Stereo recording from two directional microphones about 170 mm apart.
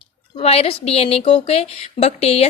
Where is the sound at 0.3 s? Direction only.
35° left (ahead or behind).